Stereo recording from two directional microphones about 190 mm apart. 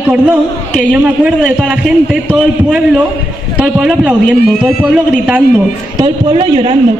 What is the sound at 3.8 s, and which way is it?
A man's voice, 5° right (ahead or behind).